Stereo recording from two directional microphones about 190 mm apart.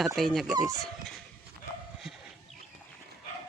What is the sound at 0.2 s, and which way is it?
Speech, centre (ahead or behind).